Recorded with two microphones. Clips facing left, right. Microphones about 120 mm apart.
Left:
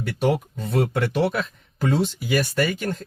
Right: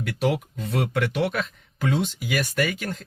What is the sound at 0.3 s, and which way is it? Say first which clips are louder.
Speech: left 3 dB; 30° left (ahead or behind).